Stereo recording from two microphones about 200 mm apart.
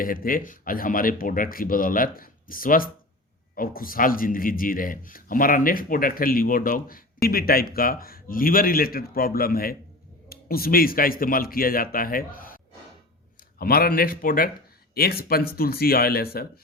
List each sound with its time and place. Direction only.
0.0 s a man's voice: 45° left (ahead or behind)
13.6 s a man's voice: 45° left (ahead or behind)